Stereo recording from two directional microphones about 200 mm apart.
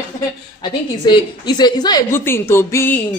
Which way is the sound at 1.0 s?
20° left (ahead or behind).